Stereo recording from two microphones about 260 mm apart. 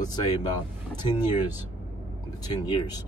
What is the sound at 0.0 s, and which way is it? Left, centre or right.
Speech, centre.